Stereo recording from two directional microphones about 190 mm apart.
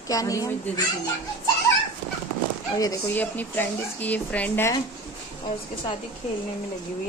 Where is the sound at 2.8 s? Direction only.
15° left (ahead or behind).